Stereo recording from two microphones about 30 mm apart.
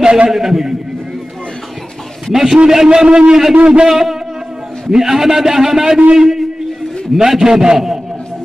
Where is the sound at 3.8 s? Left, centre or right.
Centre.